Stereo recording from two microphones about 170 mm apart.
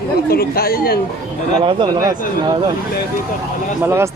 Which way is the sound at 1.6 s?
25° right (ahead or behind).